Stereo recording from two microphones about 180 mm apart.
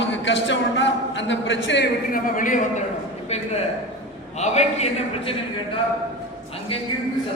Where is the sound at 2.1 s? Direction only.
45° left (ahead or behind).